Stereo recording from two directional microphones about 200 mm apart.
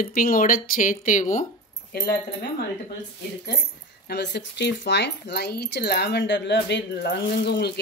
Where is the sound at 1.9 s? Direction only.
50° left (ahead or behind).